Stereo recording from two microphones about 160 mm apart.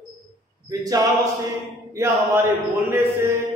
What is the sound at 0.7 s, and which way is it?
Speech, 25° right (ahead or behind).